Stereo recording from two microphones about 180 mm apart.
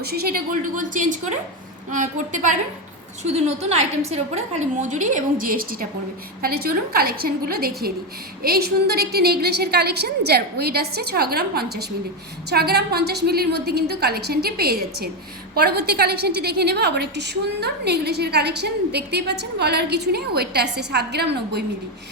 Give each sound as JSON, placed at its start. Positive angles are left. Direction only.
{"t": 0.0, "sound": "a woman's voice", "side_deg": -60}